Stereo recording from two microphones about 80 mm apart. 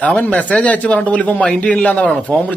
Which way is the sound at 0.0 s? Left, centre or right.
Centre.